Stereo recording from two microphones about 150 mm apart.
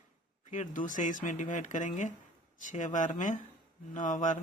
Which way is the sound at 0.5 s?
55° left (ahead or behind).